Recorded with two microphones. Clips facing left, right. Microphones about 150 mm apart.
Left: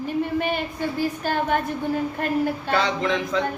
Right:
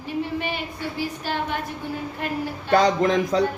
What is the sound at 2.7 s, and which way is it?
Speech, 40° right (ahead or behind).